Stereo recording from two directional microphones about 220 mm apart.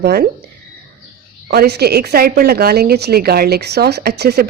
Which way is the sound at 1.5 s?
45° right (ahead or behind).